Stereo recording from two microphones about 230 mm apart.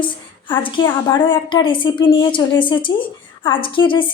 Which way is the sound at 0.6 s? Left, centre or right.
Centre.